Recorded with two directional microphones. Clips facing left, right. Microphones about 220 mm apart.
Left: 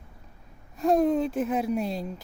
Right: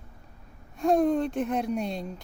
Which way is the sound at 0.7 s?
Centre (ahead or behind).